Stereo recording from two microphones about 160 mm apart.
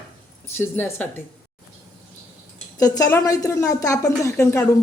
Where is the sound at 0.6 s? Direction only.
15° left (ahead or behind).